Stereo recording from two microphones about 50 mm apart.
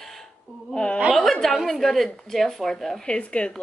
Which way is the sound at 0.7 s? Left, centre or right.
Centre.